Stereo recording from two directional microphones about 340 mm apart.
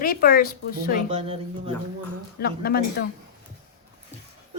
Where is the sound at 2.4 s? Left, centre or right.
Left.